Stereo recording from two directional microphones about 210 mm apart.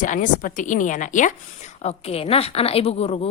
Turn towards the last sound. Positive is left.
turn(degrees=30)  # may be behind; listen again after turning